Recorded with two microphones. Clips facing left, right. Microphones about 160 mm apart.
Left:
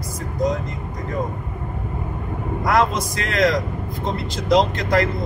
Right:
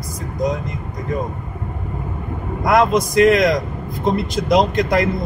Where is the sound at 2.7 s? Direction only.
15° right (ahead or behind).